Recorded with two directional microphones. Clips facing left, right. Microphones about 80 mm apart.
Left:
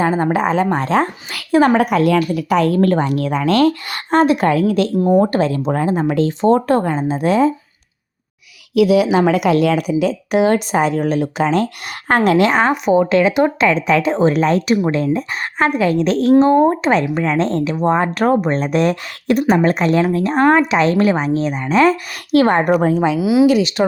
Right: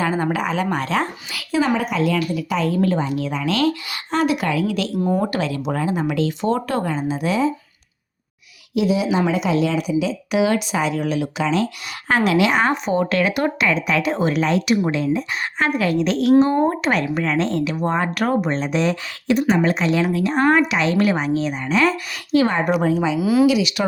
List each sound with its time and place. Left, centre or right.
0.0 s a woman's voice: left
1.3 s a woman's voice: left
8.7 s a woman's voice: left
12.7 s speech: centre
13.1 s a woman's voice: left
22.3 s a woman's voice: left
22.8 s a woman's voice: left
23.2 s speech: centre
23.5 s a woman's voice: left